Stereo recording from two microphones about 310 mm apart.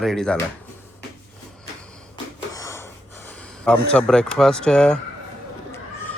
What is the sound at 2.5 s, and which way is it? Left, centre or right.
Wheeze, centre.